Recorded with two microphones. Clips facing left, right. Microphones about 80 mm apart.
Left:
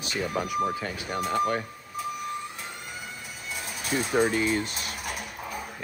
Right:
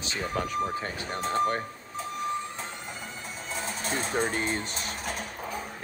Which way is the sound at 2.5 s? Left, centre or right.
Centre.